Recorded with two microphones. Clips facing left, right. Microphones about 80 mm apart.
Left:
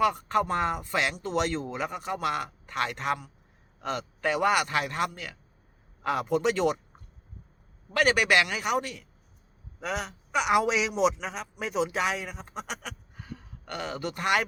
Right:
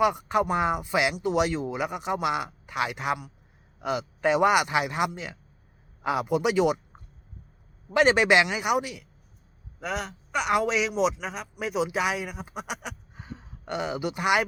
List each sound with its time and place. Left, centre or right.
0.0 s speech: centre
6.0 s speech: centre
7.9 s a man's voice: right
13.1 s a sound: right